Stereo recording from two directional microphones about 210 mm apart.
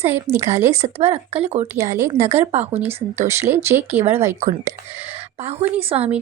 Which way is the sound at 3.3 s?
10° right (ahead or behind).